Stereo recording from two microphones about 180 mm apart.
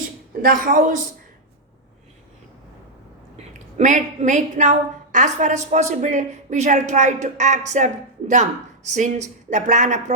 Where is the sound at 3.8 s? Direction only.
40° right (ahead or behind).